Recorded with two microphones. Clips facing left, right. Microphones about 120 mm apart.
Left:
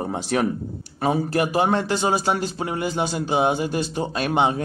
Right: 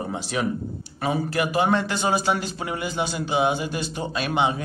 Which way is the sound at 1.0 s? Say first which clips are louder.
Left 3 dB; 35° left (ahead or behind).